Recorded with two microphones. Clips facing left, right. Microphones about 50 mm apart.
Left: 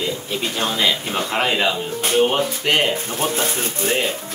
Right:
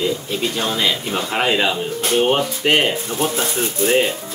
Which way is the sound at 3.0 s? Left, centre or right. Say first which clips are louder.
Right 2 dB; left.